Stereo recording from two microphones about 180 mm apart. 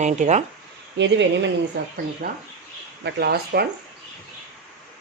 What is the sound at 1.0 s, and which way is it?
Speech, 90° right.